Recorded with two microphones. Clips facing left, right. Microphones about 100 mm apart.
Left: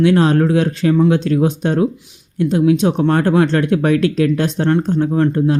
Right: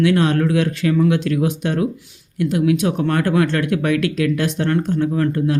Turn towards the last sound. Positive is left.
turn(degrees=25)  # may be behind; listen again after turning